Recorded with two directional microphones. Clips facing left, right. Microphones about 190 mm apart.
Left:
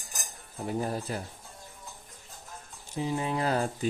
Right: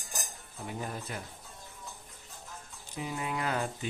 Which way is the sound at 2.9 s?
30° left (ahead or behind).